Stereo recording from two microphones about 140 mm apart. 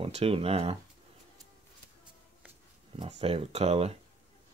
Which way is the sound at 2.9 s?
45° right (ahead or behind).